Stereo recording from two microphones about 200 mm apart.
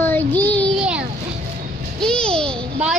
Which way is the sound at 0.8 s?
5° right (ahead or behind).